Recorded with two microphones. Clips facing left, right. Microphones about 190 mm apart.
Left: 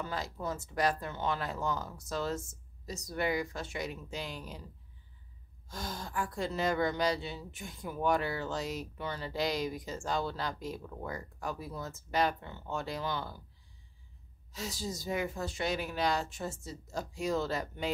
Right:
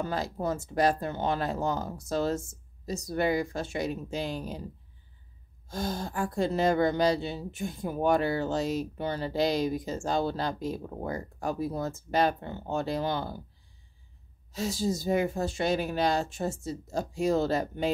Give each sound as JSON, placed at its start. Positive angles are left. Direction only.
{"t": 0.0, "sound": "speech", "side_deg": -30}
{"t": 5.7, "sound": "speech", "side_deg": -25}
{"t": 14.5, "sound": "speech", "side_deg": -30}